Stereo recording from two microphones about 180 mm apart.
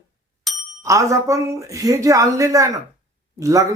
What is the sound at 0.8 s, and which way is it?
Speech, 15° right (ahead or behind).